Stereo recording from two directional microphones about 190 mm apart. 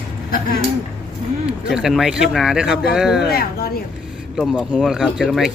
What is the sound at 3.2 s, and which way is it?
Speech, 55° left (ahead or behind).